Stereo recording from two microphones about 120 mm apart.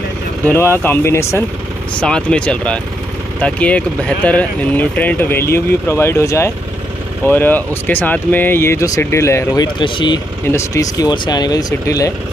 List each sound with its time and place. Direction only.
0.5 s speech: 20° left (ahead or behind)
2.0 s speech: 10° left (ahead or behind); by 10.2 s 40° left (ahead or behind)
10.5 s speech: 25° left (ahead or behind)